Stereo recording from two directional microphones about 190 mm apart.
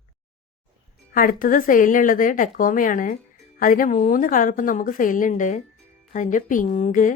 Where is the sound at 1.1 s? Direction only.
50° left (ahead or behind).